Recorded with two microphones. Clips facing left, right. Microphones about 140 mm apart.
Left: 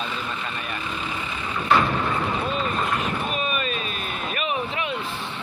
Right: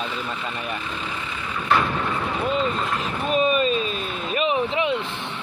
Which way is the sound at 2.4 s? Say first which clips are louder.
Right 2 dB; 20° right (ahead or behind).